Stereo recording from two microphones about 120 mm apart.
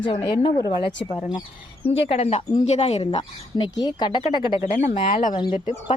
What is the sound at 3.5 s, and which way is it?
Speech, 40° left (ahead or behind).